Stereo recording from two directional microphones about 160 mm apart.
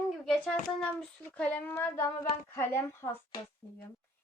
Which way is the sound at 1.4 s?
10° left (ahead or behind).